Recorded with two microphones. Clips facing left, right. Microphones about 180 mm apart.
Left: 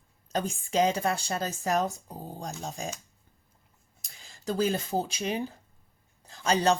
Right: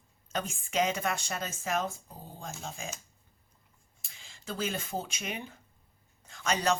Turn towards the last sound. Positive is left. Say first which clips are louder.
# left 5 dB
turn(degrees=30)  # may be behind; listen again after turning